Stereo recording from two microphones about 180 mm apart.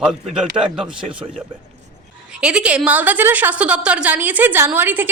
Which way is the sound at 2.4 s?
5° right (ahead or behind).